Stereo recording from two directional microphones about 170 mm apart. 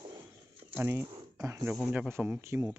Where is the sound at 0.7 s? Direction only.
15° right (ahead or behind).